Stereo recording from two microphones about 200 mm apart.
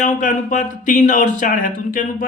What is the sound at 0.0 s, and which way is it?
A man's voice, 40° left (ahead or behind).